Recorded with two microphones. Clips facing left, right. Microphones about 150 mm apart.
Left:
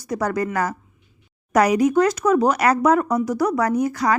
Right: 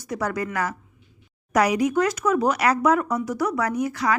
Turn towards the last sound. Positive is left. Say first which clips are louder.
# left 4 dB
turn(degrees=40)  # may be behind; listen again after turning